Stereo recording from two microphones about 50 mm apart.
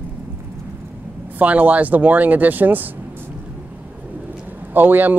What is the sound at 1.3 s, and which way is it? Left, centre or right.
Speech, right.